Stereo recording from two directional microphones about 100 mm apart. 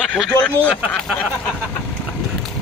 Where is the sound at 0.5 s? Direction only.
15° left (ahead or behind).